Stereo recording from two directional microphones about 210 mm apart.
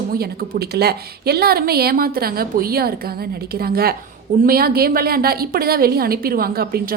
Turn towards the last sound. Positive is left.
turn(degrees=-45)  # may be behind; listen again after turning